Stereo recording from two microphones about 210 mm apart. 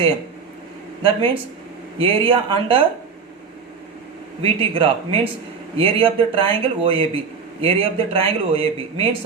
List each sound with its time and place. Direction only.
1.0 s a man's voice: 25° right (ahead or behind)
4.4 s a man's voice: 25° right (ahead or behind)